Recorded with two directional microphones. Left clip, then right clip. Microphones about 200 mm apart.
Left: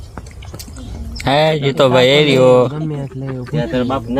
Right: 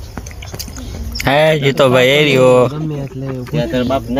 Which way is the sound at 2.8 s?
30° left (ahead or behind).